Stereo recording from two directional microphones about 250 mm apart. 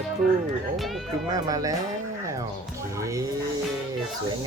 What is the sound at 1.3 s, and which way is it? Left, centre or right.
Music, centre.